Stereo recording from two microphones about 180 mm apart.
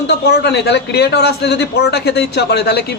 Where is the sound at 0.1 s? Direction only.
70° left (ahead or behind).